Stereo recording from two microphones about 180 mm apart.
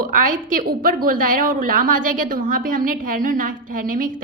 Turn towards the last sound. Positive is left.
turn(degrees=-50)  # may be behind; listen again after turning